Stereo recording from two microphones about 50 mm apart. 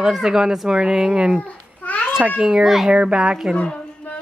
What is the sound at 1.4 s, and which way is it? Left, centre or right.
Babbling, left.